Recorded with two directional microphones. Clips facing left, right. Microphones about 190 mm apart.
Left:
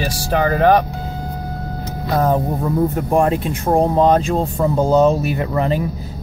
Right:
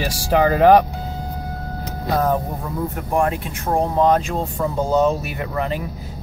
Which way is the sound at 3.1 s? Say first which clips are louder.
Left 3 dB; 25° left (ahead or behind).